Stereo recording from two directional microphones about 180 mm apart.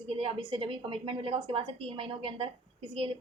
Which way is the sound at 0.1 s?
30° right (ahead or behind).